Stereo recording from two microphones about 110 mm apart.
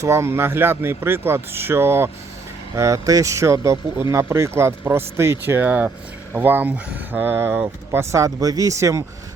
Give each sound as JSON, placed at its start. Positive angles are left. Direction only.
{"t": 0.0, "sound": "speech", "side_deg": -25}